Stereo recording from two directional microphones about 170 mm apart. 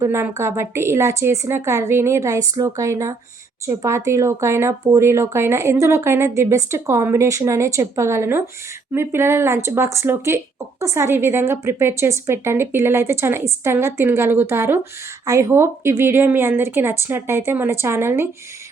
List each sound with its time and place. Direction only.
0.0 s speech: 15° right (ahead or behind)